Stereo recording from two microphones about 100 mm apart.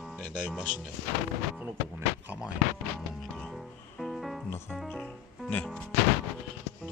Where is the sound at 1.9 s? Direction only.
20° right (ahead or behind).